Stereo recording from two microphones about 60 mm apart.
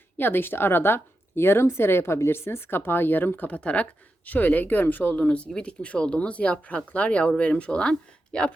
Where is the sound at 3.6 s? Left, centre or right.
Left.